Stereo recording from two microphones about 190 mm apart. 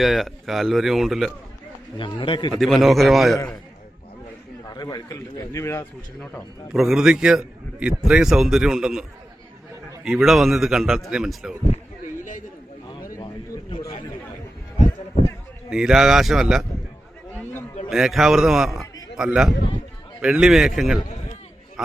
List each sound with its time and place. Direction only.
0.0 s a man's voice: centre (ahead or behind)
2.0 s a man's voice: 25° left (ahead or behind)
2.6 s a man's voice: centre (ahead or behind)
4.7 s a man's voice: 20° left (ahead or behind)
6.7 s a man's voice: centre (ahead or behind)
13.1 s a sound: 25° left (ahead or behind)
15.7 s a man's voice: centre (ahead or behind)
17.8 s a man's voice: centre (ahead or behind)